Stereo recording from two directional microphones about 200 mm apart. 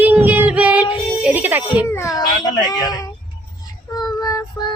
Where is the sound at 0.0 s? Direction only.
10° right (ahead or behind).